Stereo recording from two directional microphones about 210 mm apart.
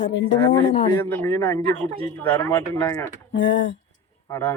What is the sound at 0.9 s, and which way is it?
Speech, 10° left (ahead or behind).